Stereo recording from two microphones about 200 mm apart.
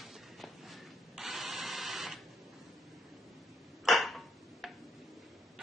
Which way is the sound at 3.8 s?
Centre (ahead or behind).